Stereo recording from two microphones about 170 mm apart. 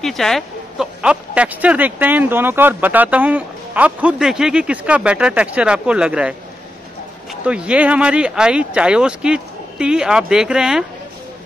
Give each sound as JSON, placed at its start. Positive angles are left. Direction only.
{"t": 0.0, "sound": "speech", "side_deg": 0}
{"t": 7.4, "sound": "speech", "side_deg": -5}